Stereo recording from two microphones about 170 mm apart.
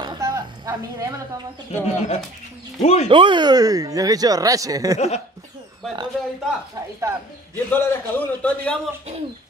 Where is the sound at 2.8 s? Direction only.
40° left (ahead or behind).